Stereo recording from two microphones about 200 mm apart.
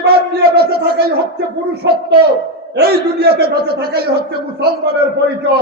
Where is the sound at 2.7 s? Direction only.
55° right (ahead or behind).